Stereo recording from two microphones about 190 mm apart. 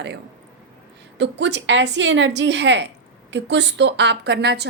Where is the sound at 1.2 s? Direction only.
70° right (ahead or behind).